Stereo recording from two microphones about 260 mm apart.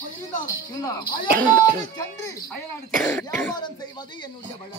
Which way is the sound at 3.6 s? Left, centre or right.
Centre.